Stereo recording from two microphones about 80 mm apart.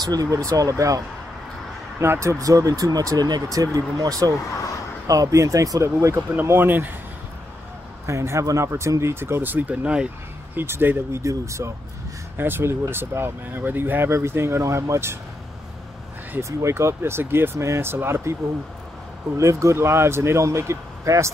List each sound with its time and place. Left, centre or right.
0.0 s speech: right
6.4 s speech: right
8.1 s speech: right; by 10.0 s centre
10.5 s speech: right
12.4 s speech: right
16.3 s speech: right
19.3 s speech: right